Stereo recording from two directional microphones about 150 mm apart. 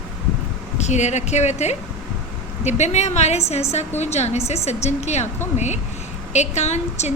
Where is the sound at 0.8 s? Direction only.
50° left (ahead or behind).